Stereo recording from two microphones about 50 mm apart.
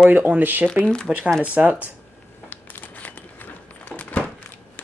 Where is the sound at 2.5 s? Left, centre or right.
Left.